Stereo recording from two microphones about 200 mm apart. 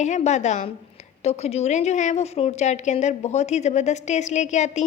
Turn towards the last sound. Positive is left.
turn(degrees=35)  # may be behind; listen again after turning